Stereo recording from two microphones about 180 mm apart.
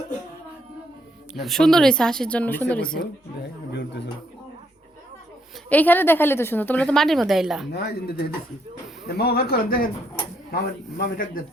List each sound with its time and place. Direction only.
1.3 s speech: centre (ahead or behind)
3.7 s speech: 75° left (ahead or behind)
5.6 s a woman's voice: 10° left (ahead or behind)
7.7 s a man's voice: 65° left (ahead or behind)